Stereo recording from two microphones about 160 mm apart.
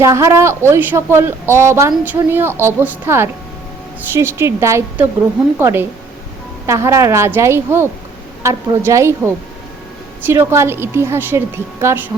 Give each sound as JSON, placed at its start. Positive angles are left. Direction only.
{"t": 0.0, "sound": "speech", "side_deg": -20}
{"t": 10.2, "sound": "speech", "side_deg": -15}